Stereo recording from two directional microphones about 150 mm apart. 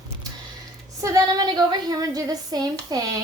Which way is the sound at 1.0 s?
20° right (ahead or behind).